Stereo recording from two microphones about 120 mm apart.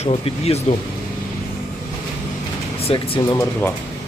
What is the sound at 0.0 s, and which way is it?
Speech, 55° left (ahead or behind).